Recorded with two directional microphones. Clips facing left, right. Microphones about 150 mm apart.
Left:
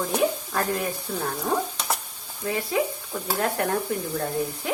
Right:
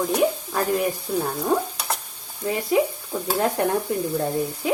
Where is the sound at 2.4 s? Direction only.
15° right (ahead or behind).